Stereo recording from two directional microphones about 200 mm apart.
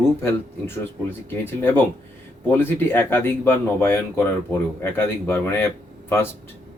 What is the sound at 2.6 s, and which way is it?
Speech, 10° left (ahead or behind).